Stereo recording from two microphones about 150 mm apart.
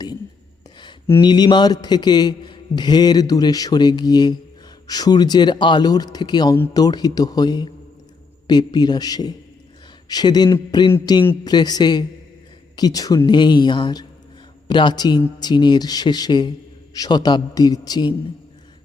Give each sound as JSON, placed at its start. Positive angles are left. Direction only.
{"t": 1.2, "sound": "a man's voice", "side_deg": 30}